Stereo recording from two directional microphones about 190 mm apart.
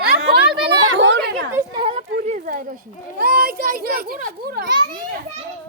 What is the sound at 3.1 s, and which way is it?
A child's voice, 50° right (ahead or behind).